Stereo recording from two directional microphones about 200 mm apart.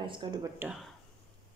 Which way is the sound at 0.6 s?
5° right (ahead or behind).